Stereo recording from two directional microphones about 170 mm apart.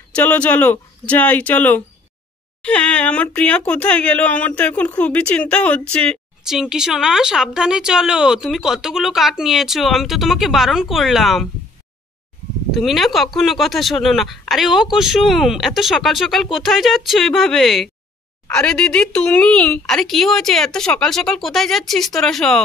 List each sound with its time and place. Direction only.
0.1 s speech: 10° left (ahead or behind)
12.7 s speech: centre (ahead or behind)